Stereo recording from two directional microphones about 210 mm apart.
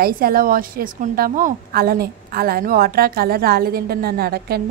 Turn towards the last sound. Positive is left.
turn(degrees=-45)  # may be behind; listen again after turning